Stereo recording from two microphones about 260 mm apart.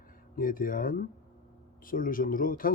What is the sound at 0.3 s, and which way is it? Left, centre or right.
Speech, left.